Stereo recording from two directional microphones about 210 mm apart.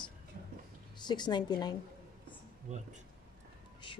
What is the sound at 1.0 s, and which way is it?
Speech, 20° left (ahead or behind).